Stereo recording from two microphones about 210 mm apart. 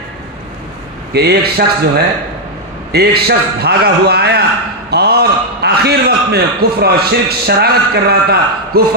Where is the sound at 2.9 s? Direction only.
50° right (ahead or behind).